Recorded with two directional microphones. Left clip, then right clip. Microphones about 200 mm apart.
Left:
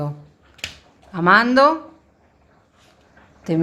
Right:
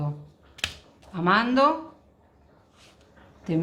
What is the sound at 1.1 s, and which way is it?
Speech, 50° left (ahead or behind).